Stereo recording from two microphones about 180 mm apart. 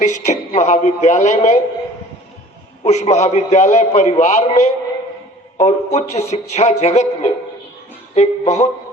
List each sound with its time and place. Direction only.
0.0 s a man's voice: 40° left (ahead or behind)
2.8 s a man's voice: 40° left (ahead or behind)